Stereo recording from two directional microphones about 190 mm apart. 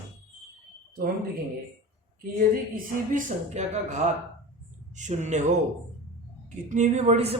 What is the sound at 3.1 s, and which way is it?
Speech, 40° right (ahead or behind).